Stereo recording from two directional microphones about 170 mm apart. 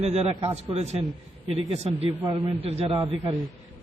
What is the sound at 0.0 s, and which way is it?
A man's voice, 40° right (ahead or behind).